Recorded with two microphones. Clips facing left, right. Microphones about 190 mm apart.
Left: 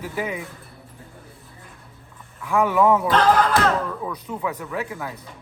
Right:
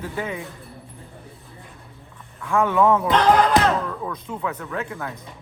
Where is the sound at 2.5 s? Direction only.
10° left (ahead or behind).